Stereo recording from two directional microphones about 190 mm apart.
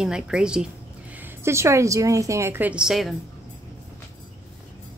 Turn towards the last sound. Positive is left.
turn(degrees=0)  # may be behind; listen again after turning